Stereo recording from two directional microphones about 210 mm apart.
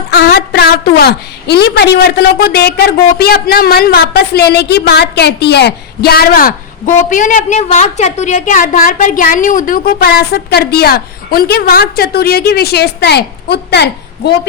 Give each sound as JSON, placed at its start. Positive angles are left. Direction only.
{"t": 0.1, "sound": "a woman's voice", "side_deg": 50}